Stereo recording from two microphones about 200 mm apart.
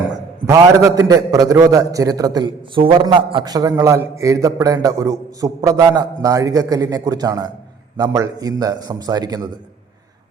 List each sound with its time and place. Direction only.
0.4 s a man's voice: 15° right (ahead or behind)